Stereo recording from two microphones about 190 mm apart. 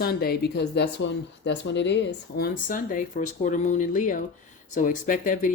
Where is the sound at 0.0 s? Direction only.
55° left (ahead or behind).